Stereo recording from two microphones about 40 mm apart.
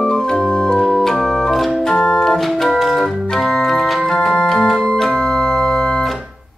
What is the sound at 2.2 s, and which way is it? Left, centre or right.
Organ, centre.